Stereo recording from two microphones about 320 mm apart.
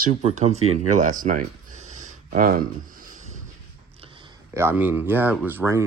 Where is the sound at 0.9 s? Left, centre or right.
Right.